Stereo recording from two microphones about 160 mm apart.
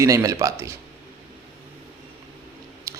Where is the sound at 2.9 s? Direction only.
15° right (ahead or behind).